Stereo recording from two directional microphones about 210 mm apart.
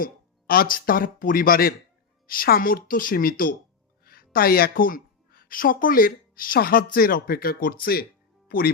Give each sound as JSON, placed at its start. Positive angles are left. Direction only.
{"t": 0.0, "sound": "a woman's voice", "side_deg": 45}